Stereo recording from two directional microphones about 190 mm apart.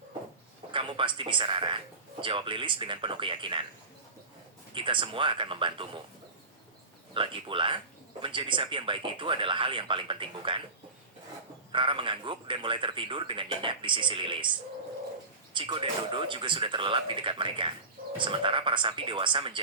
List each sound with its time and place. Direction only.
0.7 s speech: 25° right (ahead or behind)
4.7 s speech: 25° right (ahead or behind)
7.1 s speech: 25° right (ahead or behind)
11.7 s speech: 25° right (ahead or behind)
15.5 s speech: 25° right (ahead or behind)